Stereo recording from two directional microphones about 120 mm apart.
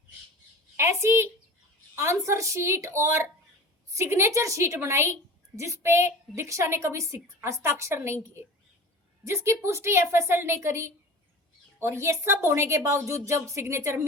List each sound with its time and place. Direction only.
0.8 s a woman's voice: 25° right (ahead or behind)